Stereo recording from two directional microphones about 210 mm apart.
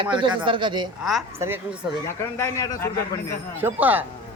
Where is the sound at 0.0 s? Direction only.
20° right (ahead or behind).